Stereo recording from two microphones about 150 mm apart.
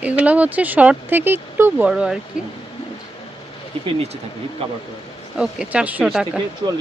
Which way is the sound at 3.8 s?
40° right (ahead or behind).